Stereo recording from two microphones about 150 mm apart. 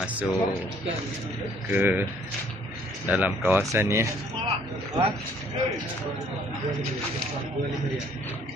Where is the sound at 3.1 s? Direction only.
10° right (ahead or behind).